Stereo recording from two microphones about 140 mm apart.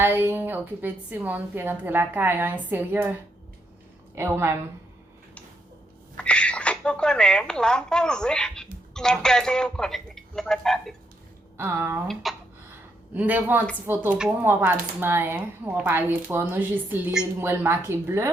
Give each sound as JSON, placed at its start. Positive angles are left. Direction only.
{"t": 0.0, "sound": "speech", "side_deg": -15}
{"t": 6.1, "sound": "speech", "side_deg": 10}
{"t": 11.5, "sound": "speech", "side_deg": -15}
{"t": 12.2, "sound": "speech", "side_deg": 0}
{"t": 13.1, "sound": "speech", "side_deg": -10}